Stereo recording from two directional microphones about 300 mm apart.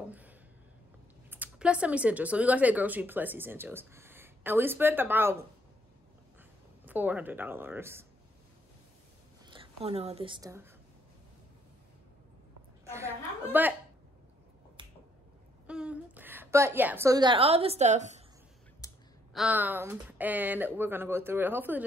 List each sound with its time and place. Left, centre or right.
1.3 s speech: centre
6.9 s speech: centre
9.5 s a woman's voice: centre
12.9 s a woman's voice: centre
15.6 s a woman's voice: centre; by 18.2 s right
18.8 s clicking: centre
19.3 s speech: centre